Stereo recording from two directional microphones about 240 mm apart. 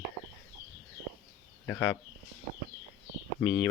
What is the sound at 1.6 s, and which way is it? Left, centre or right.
Speech, centre.